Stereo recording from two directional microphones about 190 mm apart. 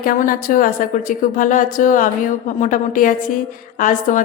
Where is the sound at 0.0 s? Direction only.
45° left (ahead or behind).